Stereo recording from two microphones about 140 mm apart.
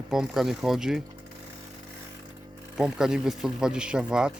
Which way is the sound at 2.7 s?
5° right (ahead or behind).